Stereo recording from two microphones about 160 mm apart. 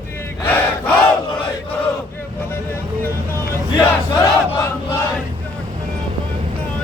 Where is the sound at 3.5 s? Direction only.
15° left (ahead or behind).